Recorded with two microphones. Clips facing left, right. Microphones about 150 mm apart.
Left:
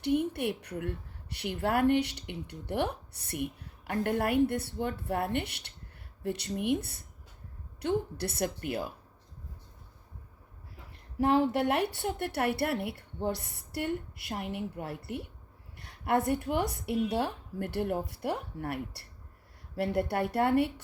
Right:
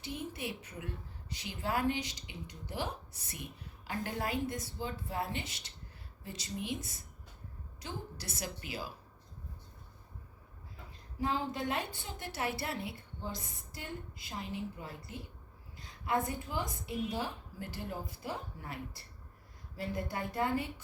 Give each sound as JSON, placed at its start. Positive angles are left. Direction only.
{"t": 0.0, "sound": "a woman's voice", "side_deg": 65}
{"t": 11.2, "sound": "speech", "side_deg": 65}